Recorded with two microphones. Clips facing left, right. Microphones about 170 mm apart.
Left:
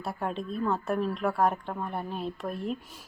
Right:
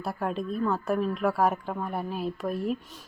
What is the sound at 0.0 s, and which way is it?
Speech, centre (ahead or behind).